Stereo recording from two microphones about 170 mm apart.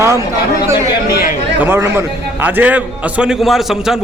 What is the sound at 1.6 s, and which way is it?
A man's voice, 15° right (ahead or behind).